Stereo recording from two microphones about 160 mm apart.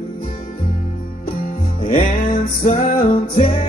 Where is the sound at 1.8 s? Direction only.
55° left (ahead or behind).